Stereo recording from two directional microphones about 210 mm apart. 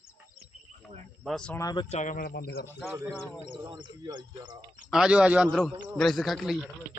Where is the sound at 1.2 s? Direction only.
5° left (ahead or behind).